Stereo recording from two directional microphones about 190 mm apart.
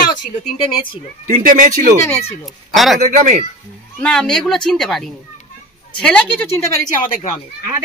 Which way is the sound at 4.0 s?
5° left (ahead or behind).